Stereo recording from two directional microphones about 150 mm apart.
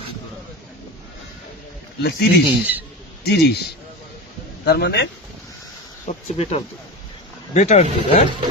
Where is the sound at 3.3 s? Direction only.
90° left.